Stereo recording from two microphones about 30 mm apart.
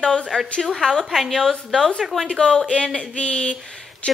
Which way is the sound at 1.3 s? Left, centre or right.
Centre.